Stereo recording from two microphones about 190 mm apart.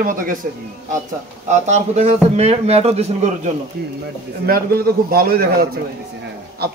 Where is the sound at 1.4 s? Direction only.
35° right (ahead or behind).